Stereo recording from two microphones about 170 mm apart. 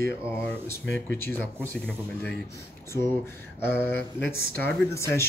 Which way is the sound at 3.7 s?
10° left (ahead or behind).